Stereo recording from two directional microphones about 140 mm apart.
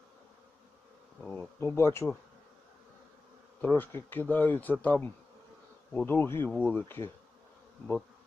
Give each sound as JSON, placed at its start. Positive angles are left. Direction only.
{"t": 1.2, "sound": "speech", "side_deg": 5}
{"t": 1.5, "sound": "bee", "side_deg": 20}
{"t": 3.6, "sound": "bee", "side_deg": 15}